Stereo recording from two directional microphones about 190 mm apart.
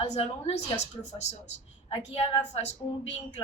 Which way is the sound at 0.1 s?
35° left (ahead or behind).